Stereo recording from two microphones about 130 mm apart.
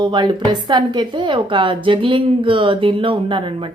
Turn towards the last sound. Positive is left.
turn(degrees=-40)  # may be behind; listen again after turning